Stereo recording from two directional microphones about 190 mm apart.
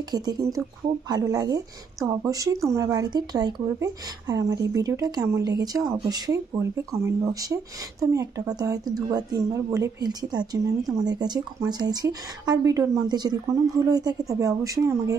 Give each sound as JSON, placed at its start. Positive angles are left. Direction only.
{"t": 0.1, "sound": "speech", "side_deg": -20}